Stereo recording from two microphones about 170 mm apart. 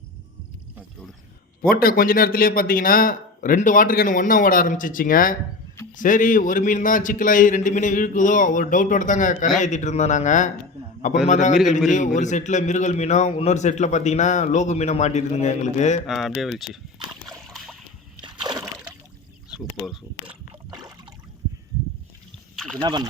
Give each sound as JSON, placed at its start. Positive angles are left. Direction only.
{"t": 1.7, "sound": "a man's voice", "side_deg": 60}
{"t": 16.0, "sound": "speech", "side_deg": 0}
{"t": 17.5, "sound": "boat", "side_deg": 0}
{"t": 18.2, "sound": "splash", "side_deg": -25}
{"t": 19.5, "sound": "speech", "side_deg": 0}
{"t": 20.2, "sound": "rowboat", "side_deg": -30}
{"t": 22.5, "sound": "speech", "side_deg": 5}
{"t": 22.8, "sound": "speech", "side_deg": -25}